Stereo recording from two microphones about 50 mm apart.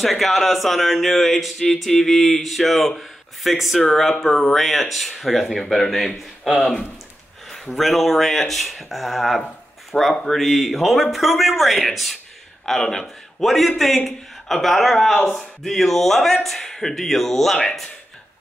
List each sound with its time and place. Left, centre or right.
0.0 s a man's voice: centre
3.8 s a man's voice: centre